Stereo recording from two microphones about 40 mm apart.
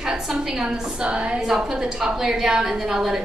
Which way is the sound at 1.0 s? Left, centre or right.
Right.